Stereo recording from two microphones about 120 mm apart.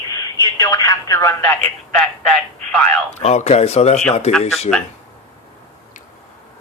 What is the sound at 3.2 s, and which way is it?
Speech, 65° left (ahead or behind).